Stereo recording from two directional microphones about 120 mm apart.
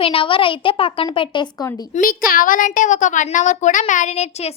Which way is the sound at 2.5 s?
90° left.